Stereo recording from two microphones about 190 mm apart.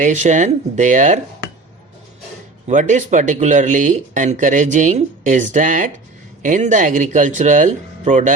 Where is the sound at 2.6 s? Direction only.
40° right (ahead or behind).